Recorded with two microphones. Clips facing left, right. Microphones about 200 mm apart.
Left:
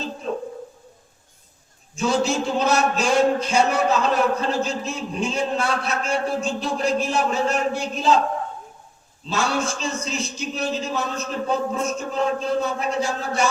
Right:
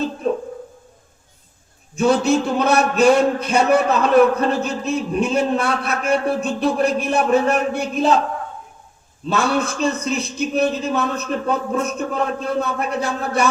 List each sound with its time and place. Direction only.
2.0 s a man's voice: 60° right (ahead or behind)
9.3 s a man's voice: 60° right (ahead or behind)